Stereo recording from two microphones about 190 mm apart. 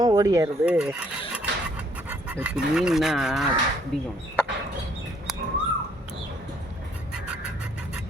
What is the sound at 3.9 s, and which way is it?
Mechanisms, centre (ahead or behind).